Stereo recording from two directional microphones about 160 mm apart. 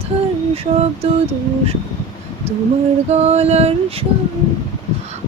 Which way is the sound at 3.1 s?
40° right (ahead or behind).